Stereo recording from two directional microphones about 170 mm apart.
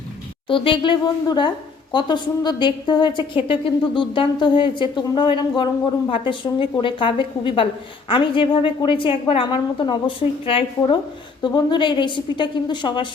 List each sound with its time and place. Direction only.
0.4 s a woman's voice: 30° left (ahead or behind)